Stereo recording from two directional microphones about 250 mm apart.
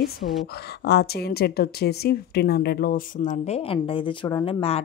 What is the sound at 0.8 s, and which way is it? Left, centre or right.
A woman's voice, left.